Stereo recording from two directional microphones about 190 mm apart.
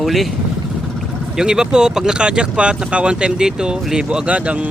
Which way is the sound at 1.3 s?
5° right (ahead or behind).